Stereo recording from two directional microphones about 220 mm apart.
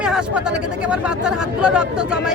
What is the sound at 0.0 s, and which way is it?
Speech, 5° right (ahead or behind).